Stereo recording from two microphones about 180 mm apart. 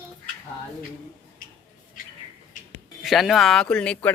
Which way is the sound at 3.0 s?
Centre (ahead or behind).